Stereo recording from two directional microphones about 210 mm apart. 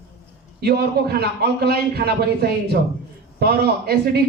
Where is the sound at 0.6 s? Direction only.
50° right (ahead or behind).